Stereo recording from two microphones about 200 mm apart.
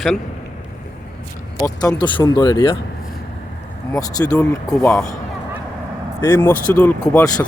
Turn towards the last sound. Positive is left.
turn(degrees=15)  # may be behind; listen again after turning